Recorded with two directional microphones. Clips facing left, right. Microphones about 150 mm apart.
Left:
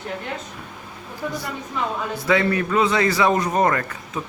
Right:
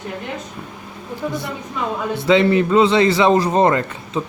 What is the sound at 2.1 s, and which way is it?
A man's voice, 25° right (ahead or behind).